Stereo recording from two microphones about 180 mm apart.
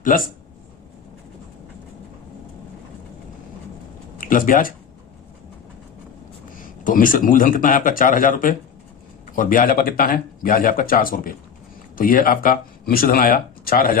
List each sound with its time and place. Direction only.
0.1 s speech: 50° left (ahead or behind)
4.2 s speech: 50° left (ahead or behind)
6.8 s speech: 50° left (ahead or behind)